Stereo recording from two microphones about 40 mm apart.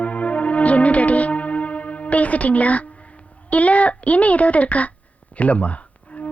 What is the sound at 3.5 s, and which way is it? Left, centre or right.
Speech, left.